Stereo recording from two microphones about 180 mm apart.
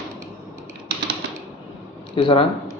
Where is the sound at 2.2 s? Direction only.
30° left (ahead or behind).